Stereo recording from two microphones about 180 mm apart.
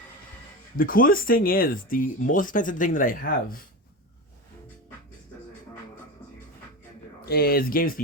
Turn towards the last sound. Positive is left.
turn(degrees=50)  # may be behind; listen again after turning